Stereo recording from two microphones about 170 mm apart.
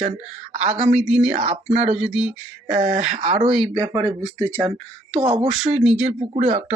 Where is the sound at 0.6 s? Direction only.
40° right (ahead or behind).